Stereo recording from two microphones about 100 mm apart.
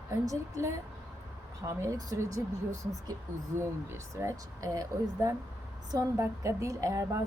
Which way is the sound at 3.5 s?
25° right (ahead or behind).